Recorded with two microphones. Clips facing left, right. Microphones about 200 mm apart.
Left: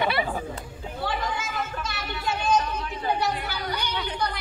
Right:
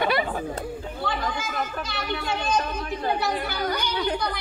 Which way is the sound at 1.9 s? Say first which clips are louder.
Right 3 dB; 55° right (ahead or behind).